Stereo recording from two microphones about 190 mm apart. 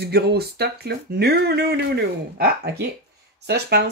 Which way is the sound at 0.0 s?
55° right (ahead or behind).